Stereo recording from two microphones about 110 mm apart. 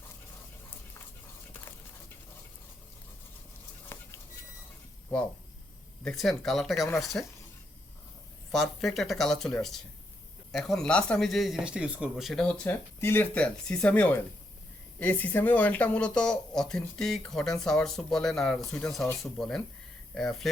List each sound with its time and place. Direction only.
3.9 s a sound: 25° left (ahead or behind)
6.1 s speech: centre (ahead or behind)
8.5 s speech: centre (ahead or behind)
13.0 s speech: 20° left (ahead or behind)